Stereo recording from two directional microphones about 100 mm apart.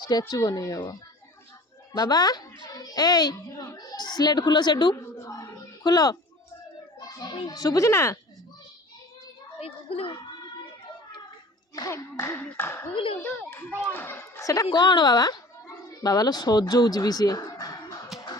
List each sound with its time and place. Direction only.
0.1 s speech: 40° left (ahead or behind)
2.0 s a child's voice: 40° left (ahead or behind)
5.1 s a sound: 30° left (ahead or behind)
5.8 s speech: 40° left (ahead or behind)
7.4 s speech: 35° left (ahead or behind)
9.6 s a child's voice: 75° left (ahead or behind)
11.7 s a child's voice: 30° left (ahead or behind)
12.9 s a child's voice: 65° left (ahead or behind)
13.2 s a child's voice: 10° left (ahead or behind)
13.5 s a child's voice: 20° left (ahead or behind)
14.7 s a woman's voice: 50° left (ahead or behind)